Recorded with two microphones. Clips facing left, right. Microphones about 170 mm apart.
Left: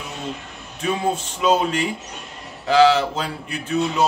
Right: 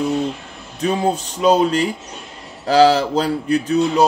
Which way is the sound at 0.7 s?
35° right (ahead or behind).